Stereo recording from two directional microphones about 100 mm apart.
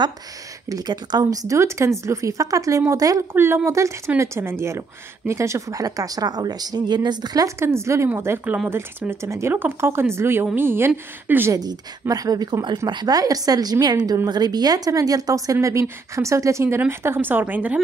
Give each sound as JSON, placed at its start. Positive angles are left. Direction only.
{"t": 0.7, "sound": "a woman's voice", "side_deg": -40}
{"t": 3.3, "sound": "speech", "side_deg": -25}
{"t": 11.5, "sound": "a woman's voice", "side_deg": -40}